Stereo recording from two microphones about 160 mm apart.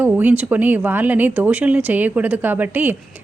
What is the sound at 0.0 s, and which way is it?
A woman's voice, 10° right (ahead or behind).